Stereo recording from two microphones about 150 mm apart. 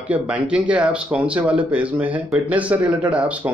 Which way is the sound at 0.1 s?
10° right (ahead or behind).